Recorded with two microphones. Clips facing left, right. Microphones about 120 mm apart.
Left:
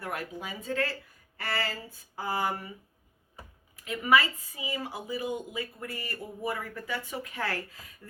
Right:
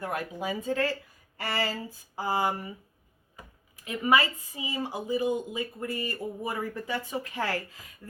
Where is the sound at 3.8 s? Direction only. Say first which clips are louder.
Even; 20° right (ahead or behind).